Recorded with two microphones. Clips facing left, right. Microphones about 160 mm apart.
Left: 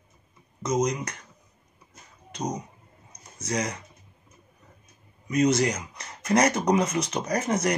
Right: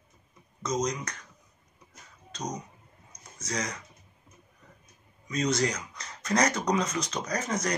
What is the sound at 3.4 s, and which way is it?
Speech, 25° left (ahead or behind).